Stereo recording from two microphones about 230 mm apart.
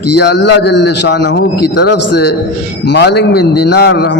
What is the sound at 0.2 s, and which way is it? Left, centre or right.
A man's voice, left.